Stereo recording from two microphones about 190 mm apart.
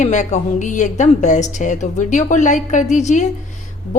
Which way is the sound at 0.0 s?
40° left (ahead or behind).